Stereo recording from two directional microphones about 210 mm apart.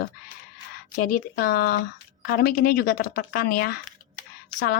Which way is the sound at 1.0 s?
45° left (ahead or behind).